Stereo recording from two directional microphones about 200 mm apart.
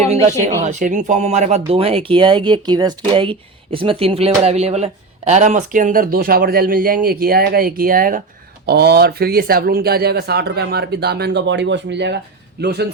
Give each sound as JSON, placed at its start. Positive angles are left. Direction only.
{"t": 0.1, "sound": "a man's voice", "side_deg": -30}